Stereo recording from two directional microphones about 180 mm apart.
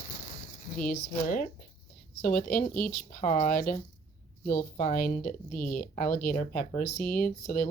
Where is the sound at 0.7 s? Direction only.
50° left (ahead or behind).